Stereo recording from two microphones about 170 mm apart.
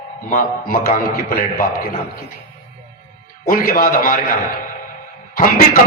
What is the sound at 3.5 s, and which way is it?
Speech, 55° left (ahead or behind).